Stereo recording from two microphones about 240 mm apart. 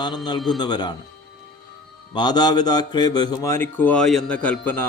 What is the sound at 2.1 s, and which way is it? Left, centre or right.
A man's voice, centre.